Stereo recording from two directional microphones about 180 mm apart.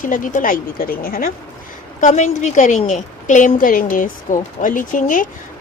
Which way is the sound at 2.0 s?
40° left (ahead or behind).